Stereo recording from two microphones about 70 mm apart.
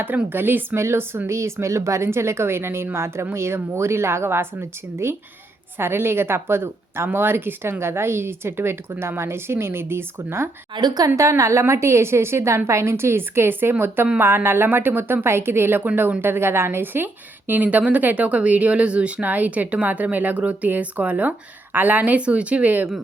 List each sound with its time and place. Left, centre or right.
0.3 s a woman's voice: right
10.8 s a woman's voice: right
11.2 s a woman's voice: right